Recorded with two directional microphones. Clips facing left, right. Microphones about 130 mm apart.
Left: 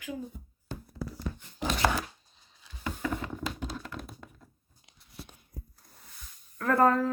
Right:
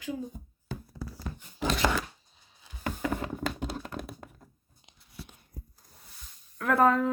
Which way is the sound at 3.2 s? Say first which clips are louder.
Right 3 dB; 40° right (ahead or behind).